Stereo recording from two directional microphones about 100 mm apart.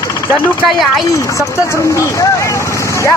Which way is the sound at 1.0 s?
30° left (ahead or behind).